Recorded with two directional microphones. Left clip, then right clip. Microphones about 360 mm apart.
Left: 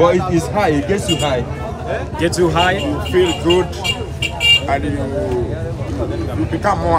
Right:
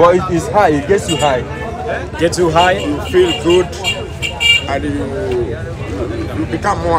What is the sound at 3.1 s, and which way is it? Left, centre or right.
Speech, centre.